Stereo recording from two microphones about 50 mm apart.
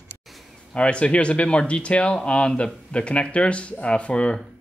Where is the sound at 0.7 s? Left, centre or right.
Left.